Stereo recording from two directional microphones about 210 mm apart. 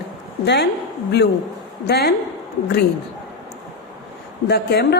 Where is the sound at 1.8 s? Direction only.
50° left (ahead or behind).